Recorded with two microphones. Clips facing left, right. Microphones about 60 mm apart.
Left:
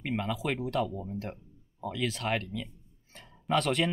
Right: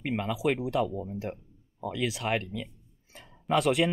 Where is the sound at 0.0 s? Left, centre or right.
Centre.